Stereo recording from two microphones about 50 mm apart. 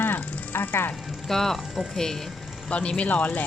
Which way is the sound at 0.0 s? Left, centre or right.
Left.